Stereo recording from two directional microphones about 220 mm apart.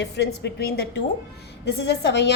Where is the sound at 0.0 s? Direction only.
50° left (ahead or behind).